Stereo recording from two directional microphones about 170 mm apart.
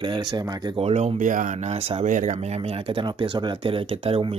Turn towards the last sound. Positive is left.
turn(degrees=-35)  # may be behind; listen again after turning